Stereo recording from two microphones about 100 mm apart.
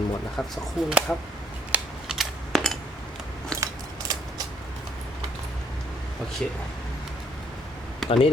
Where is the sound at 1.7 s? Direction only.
5° right (ahead or behind).